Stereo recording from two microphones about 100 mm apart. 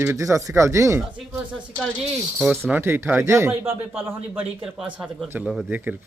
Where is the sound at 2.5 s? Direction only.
20° right (ahead or behind).